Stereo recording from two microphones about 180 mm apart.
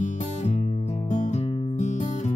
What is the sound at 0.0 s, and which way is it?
Music, 40° left (ahead or behind).